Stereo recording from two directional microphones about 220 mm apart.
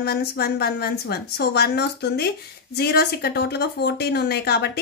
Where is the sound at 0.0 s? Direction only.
45° left (ahead or behind).